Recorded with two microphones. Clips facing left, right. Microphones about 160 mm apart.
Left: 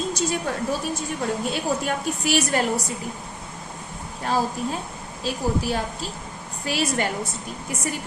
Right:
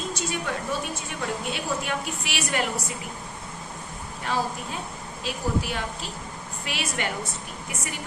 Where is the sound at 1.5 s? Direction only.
40° left (ahead or behind).